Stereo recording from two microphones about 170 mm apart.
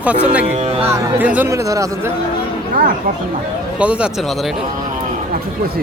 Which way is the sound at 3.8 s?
5° right (ahead or behind).